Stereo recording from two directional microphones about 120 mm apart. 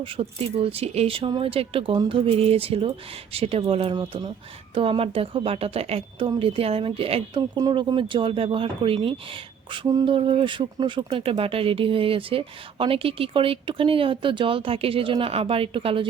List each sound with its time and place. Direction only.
0.0 s speech: 55° right (ahead or behind)
3.9 s speech: 35° right (ahead or behind)
4.7 s speech: 50° right (ahead or behind)